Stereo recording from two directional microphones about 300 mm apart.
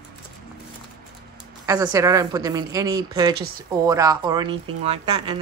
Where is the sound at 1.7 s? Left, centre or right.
Centre.